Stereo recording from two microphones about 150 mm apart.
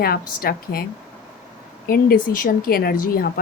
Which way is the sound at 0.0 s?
90° left.